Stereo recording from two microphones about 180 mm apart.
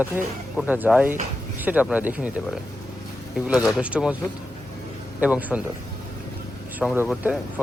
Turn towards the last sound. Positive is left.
turn(degrees=0)  # may be behind; listen again after turning